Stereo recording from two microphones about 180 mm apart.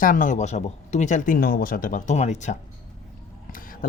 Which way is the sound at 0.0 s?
50° left (ahead or behind).